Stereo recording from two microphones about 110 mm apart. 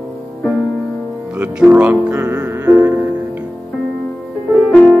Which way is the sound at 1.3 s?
10° right (ahead or behind).